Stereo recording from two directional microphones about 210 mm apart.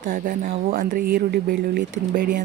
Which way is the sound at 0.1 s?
40° right (ahead or behind).